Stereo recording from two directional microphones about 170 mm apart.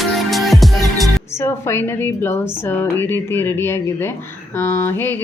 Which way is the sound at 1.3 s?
15° left (ahead or behind).